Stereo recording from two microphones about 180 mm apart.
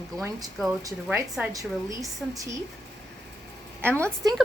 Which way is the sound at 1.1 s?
15° right (ahead or behind).